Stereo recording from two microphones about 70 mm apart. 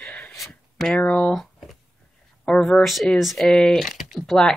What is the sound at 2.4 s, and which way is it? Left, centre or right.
Speech, centre.